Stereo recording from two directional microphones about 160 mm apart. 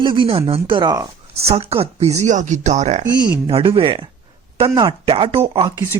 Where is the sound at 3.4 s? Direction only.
35° right (ahead or behind).